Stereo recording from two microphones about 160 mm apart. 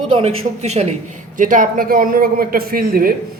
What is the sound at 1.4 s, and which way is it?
Speech, 55° right (ahead or behind).